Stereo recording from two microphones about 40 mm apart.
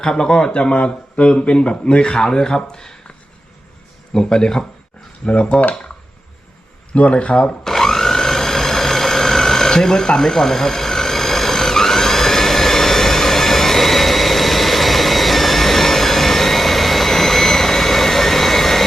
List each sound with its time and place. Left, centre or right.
0.0 s speech: centre
4.1 s speech: centre
5.2 s speech: left
6.9 s speech: left
7.6 s vehicle: centre